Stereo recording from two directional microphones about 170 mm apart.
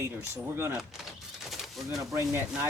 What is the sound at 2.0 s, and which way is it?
Speech, 20° right (ahead or behind).